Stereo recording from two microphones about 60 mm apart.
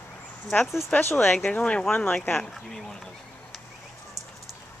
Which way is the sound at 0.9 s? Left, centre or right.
Left.